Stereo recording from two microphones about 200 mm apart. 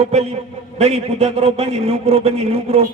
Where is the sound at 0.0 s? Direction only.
35° right (ahead or behind).